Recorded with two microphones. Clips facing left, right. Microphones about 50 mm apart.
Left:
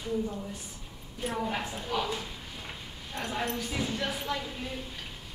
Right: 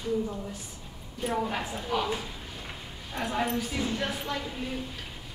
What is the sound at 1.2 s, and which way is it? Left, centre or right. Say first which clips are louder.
Speech: right 2 dB; centre.